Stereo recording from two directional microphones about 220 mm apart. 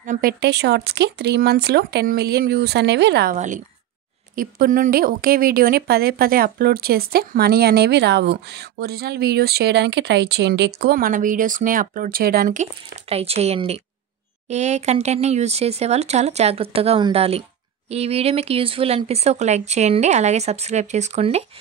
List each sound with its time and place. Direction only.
0.0 s speech: 40° right (ahead or behind)
3.3 s speech: 35° right (ahead or behind)
13.1 s speech: 25° right (ahead or behind)